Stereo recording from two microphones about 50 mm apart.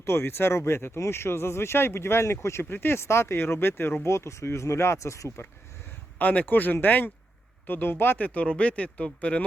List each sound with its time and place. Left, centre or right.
0.0 s speech: left
2.6 s speech: left
4.0 s speech: left
6.1 s speech: left
8.3 s speech: left